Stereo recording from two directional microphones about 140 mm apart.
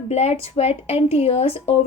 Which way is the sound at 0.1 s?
50° left (ahead or behind).